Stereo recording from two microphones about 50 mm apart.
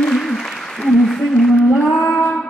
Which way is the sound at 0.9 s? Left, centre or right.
Centre.